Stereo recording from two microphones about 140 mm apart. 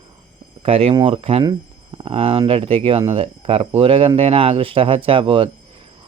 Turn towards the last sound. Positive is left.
turn(degrees=-40)  # may be behind; listen again after turning